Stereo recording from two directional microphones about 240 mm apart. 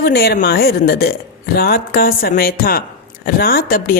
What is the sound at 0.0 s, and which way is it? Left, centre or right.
A woman's voice, left.